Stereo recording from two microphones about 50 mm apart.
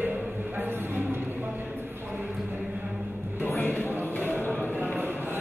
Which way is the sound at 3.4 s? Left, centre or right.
Left.